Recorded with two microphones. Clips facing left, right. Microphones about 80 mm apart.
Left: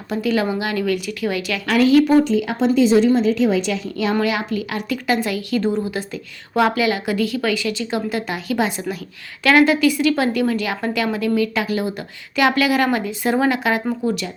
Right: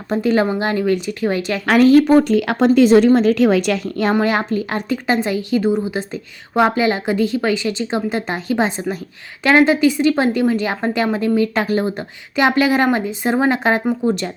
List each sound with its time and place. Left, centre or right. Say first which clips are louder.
0.1 s a woman's voice: right 3 dB; right
1.6 s a woman's voice: right 3 dB; right
2.2 s speech: right 3 dB; right
3.8 s a woman's voice: right 3 dB; right